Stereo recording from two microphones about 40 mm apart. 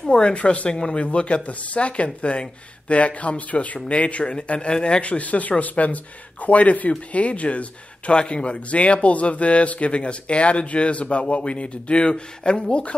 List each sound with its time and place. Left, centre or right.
0.0 s speech: left
0.7 s speech: left